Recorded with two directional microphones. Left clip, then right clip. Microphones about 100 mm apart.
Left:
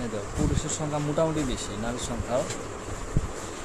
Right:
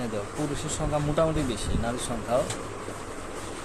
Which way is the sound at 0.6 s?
25° right (ahead or behind).